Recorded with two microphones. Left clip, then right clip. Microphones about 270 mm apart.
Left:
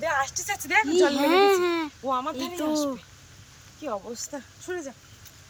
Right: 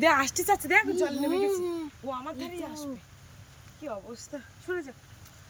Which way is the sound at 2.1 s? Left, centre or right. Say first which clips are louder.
Left 8 dB; centre.